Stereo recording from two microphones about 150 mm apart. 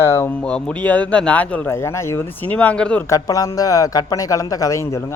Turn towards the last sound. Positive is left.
turn(degrees=20)  # may be behind; listen again after turning